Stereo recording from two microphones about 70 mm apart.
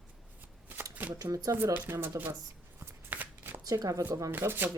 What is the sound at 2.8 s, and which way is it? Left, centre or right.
Shuffling cards, right.